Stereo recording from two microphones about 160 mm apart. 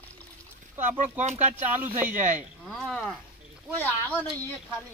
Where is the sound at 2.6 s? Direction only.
Centre (ahead or behind).